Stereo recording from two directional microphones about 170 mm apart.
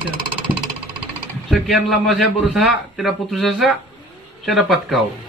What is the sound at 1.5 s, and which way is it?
A man's voice, centre (ahead or behind).